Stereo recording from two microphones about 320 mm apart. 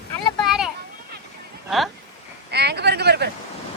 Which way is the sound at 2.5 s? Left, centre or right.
Right.